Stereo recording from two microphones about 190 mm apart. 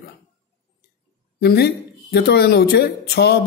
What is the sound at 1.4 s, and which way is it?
A man's voice, 60° left (ahead or behind).